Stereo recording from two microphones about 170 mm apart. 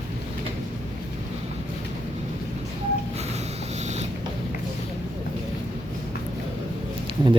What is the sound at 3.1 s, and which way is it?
Vehicle, 40° right (ahead or behind).